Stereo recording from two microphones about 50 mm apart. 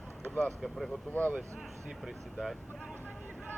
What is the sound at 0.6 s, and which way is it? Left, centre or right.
Speech, centre.